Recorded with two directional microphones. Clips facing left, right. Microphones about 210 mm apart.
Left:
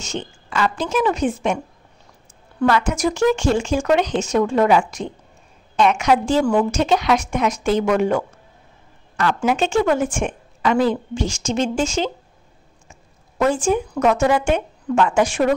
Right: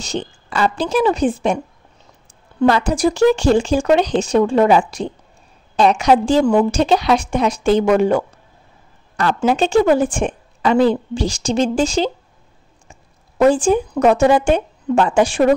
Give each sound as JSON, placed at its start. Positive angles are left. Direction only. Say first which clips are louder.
{"t": 0.0, "sound": "speech", "louder": "right 4 dB", "side_deg": -35}
{"t": 2.6, "sound": "a woman's voice", "louder": "right 3 dB", "side_deg": -35}
{"t": 13.4, "sound": "speech", "louder": "right 5 dB", "side_deg": -30}